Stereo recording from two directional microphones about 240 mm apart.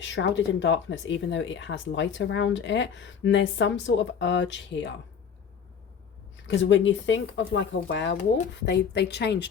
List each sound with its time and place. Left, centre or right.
0.0 s speech: left
6.3 s speech: left